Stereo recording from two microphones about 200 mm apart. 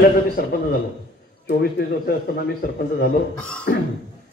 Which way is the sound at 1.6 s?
50° left (ahead or behind).